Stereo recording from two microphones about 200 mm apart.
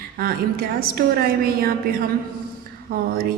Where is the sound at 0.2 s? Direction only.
50° right (ahead or behind).